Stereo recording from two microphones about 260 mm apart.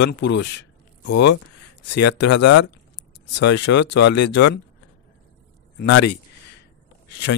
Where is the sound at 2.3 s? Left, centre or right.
Left.